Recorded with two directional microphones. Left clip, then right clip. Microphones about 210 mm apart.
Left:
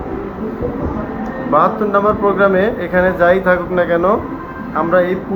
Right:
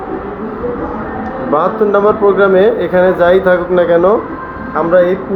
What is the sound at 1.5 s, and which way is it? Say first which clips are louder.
Speech: right 2 dB; 45° right (ahead or behind).